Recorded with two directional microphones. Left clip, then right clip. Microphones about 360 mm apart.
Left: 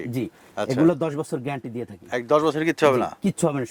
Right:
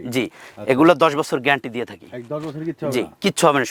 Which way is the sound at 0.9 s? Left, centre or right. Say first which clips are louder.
Right 8 dB; centre.